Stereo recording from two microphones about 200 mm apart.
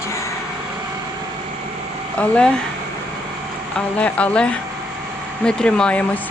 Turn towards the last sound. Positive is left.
turn(degrees=5)  # may be behind; listen again after turning